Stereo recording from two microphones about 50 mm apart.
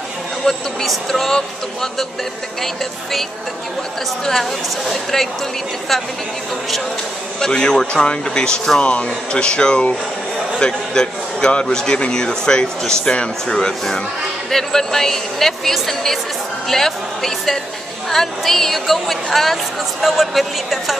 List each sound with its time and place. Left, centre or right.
0.5 s a man's voice: centre
4.3 s speech: centre
7.3 s a man's voice: centre